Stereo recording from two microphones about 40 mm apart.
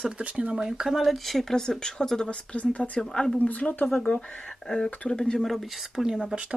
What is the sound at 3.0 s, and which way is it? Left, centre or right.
Speech, centre.